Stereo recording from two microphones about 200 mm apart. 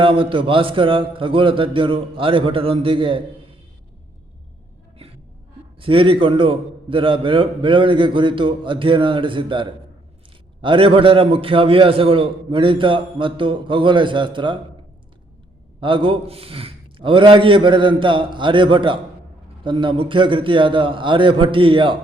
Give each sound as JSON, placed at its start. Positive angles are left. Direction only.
{"t": 0.0, "sound": "a man's voice", "side_deg": -25}
{"t": 5.8, "sound": "a man's voice", "side_deg": -25}
{"t": 15.8, "sound": "a man's voice", "side_deg": -25}